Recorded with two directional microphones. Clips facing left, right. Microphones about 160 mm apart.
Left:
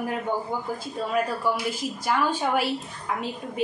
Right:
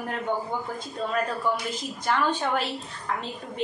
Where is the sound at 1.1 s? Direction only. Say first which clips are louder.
Left 2 dB; 10° left (ahead or behind).